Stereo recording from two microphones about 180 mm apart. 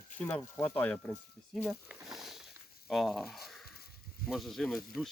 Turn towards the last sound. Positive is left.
turn(degrees=0)  # may be behind; listen again after turning